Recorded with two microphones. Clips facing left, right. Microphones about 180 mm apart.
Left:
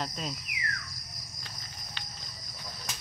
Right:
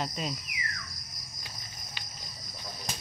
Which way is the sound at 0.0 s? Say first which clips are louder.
Right 2 dB; 5° right (ahead or behind).